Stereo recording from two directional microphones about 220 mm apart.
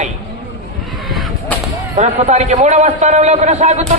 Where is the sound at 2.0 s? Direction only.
30° right (ahead or behind).